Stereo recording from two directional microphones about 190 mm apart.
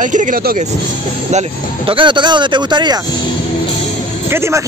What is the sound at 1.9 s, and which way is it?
Speech, 25° right (ahead or behind).